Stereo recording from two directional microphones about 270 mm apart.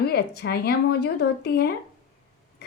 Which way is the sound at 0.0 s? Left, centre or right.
Left.